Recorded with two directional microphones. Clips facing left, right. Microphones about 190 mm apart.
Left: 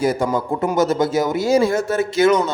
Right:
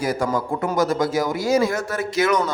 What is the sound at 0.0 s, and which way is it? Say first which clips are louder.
Speech: left 3 dB; 25° left (ahead or behind).